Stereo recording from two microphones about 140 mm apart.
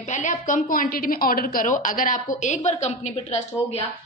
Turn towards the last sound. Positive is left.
turn(degrees=45)  # may be behind; listen again after turning